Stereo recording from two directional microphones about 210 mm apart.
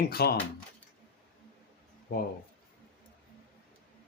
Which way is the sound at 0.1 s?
50° left (ahead or behind).